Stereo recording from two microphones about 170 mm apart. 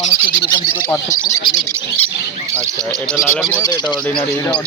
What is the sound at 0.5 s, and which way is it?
Speech, 15° left (ahead or behind).